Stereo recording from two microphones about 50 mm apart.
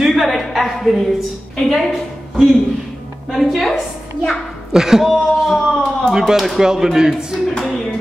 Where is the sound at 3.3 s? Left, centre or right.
Centre.